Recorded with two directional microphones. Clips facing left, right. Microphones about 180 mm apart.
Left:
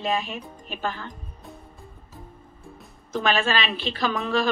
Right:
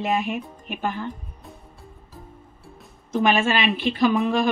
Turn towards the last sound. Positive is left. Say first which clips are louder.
# right 5 dB
turn(degrees=-15)  # may be behind; listen again after turning